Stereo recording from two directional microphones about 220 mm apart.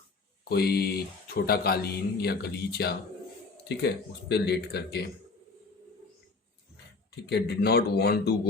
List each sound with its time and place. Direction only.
0.4 s speech: 45° left (ahead or behind)
7.3 s speech: 50° left (ahead or behind)